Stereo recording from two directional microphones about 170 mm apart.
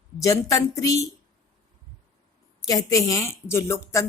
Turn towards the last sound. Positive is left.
turn(degrees=15)  # may be behind; listen again after turning